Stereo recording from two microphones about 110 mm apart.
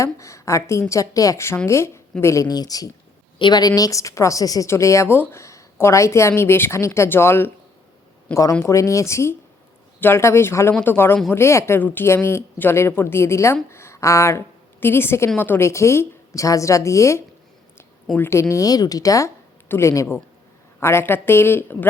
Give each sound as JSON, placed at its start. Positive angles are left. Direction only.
{"t": 0.0, "sound": "a woman's voice", "side_deg": 30}